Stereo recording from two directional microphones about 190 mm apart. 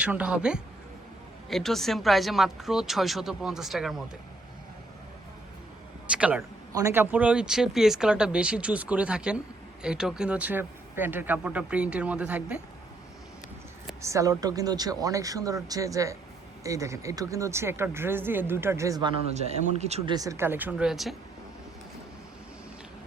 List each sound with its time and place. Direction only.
0.0 s speech: 5° right (ahead or behind)
6.1 s speech: 5° right (ahead or behind)
14.0 s speech: 15° right (ahead or behind)
19.3 s speech: 35° right (ahead or behind)
20.1 s speech: 15° right (ahead or behind)